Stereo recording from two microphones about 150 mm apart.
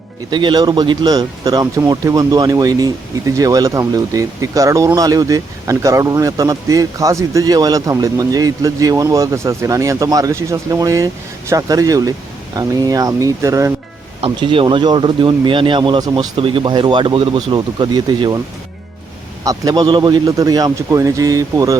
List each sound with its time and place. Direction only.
0.3 s speech: 30° right (ahead or behind)
14.2 s speech: 35° right (ahead or behind)
19.5 s speech: 25° right (ahead or behind)